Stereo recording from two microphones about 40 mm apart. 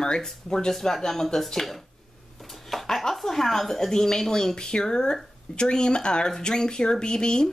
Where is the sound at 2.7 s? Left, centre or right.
Centre.